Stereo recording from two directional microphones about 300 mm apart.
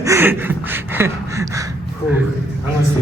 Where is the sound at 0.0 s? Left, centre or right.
Centre.